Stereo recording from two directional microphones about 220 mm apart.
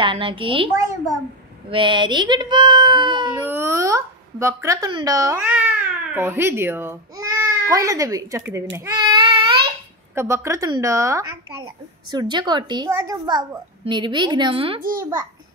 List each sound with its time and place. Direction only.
0.0 s a child's voice: 25° right (ahead or behind)
3.3 s speech: 10° right (ahead or behind)
8.7 s child singing: 15° right (ahead or behind)
10.1 s a woman's voice: 10° right (ahead or behind)
14.8 s a child's voice: 40° right (ahead or behind)